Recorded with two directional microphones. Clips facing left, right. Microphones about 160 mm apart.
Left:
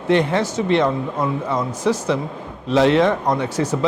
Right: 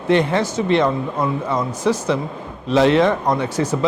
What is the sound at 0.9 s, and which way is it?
Speech, 30° right (ahead or behind).